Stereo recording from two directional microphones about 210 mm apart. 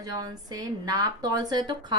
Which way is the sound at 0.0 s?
20° right (ahead or behind).